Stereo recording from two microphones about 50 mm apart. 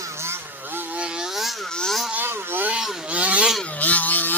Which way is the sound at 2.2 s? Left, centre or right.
Right.